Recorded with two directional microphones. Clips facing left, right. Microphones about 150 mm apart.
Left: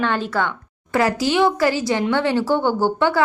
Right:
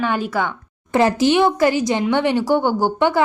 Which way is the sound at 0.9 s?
20° right (ahead or behind).